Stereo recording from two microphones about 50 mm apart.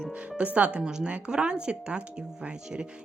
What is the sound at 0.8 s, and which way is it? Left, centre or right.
Speech, centre.